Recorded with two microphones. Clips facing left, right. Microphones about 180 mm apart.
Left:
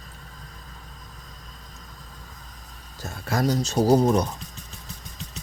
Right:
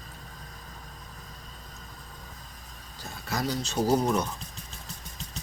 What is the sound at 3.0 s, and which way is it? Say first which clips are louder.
Speech: left 7 dB; 50° left (ahead or behind).